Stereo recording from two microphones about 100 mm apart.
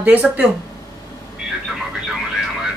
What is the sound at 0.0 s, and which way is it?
Speech, 15° right (ahead or behind).